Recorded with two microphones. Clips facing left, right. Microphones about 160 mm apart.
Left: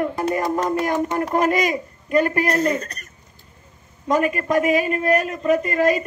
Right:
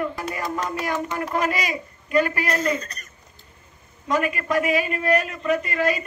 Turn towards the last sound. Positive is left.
turn(degrees=45)  # may be behind; listen again after turning